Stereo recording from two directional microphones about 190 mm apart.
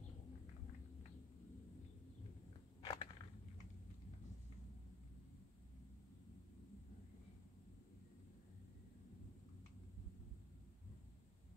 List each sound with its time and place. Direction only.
2.8 s crushing: 30° left (ahead or behind)